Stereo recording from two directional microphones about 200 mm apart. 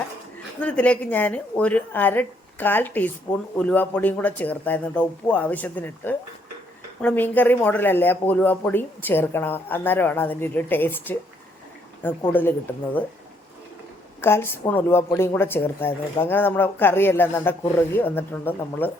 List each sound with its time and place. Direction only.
0.6 s speech: 5° left (ahead or behind)
3.3 s a man's voice: 20° left (ahead or behind)
3.6 s speech: 10° left (ahead or behind)
12.3 s speech: 10° left (ahead or behind)
14.2 s speech: 10° left (ahead or behind)